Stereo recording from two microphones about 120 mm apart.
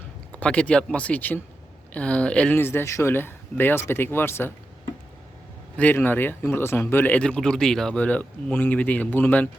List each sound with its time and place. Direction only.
0.3 s speech: 10° left (ahead or behind)
5.7 s speech: 15° left (ahead or behind)